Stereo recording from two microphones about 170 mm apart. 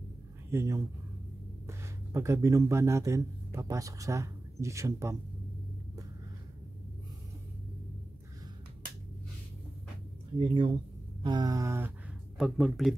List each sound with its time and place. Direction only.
0.5 s speech: 15° right (ahead or behind)
10.4 s a sound: 30° right (ahead or behind)
12.4 s speech: centre (ahead or behind)